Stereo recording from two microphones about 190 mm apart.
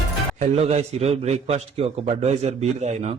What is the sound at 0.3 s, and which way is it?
A man's voice, 35° right (ahead or behind).